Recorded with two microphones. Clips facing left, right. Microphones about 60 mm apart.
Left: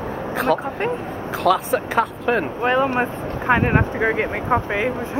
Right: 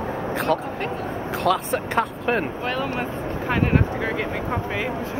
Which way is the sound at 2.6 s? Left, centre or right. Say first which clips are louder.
Left 7 dB; left.